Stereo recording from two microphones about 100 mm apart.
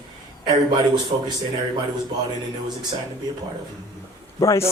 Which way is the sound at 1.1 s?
75° right (ahead or behind).